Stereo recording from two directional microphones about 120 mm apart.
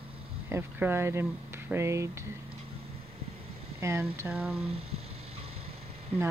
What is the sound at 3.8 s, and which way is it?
Speech, 20° right (ahead or behind).